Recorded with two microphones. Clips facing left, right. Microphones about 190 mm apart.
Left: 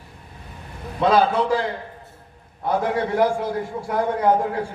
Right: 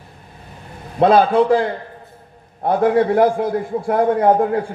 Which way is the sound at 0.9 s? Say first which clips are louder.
Right 5 dB; 55° right (ahead or behind).